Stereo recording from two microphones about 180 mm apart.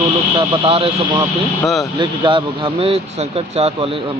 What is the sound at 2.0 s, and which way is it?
Speech, 25° right (ahead or behind).